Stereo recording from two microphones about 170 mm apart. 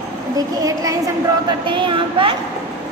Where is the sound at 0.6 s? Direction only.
20° right (ahead or behind).